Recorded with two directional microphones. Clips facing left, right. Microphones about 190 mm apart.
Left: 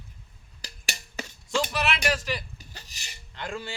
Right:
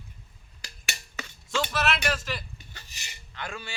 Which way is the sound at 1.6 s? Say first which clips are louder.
Even; 10° left (ahead or behind).